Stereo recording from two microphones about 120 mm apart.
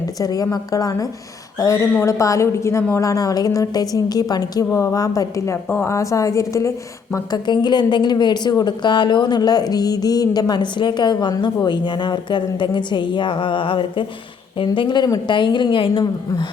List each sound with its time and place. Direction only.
0.2 s a woman's voice: 30° left (ahead or behind)